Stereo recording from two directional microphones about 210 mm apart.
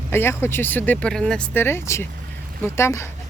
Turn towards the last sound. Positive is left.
turn(degrees=15)  # may be behind; listen again after turning